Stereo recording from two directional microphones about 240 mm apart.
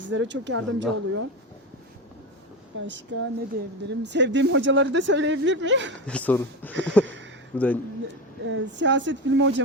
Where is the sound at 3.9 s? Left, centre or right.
Right.